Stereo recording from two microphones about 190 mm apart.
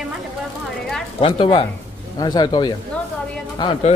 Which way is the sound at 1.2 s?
25° left (ahead or behind).